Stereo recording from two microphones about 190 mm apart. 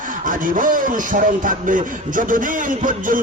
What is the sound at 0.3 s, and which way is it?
A man's voice, 45° right (ahead or behind).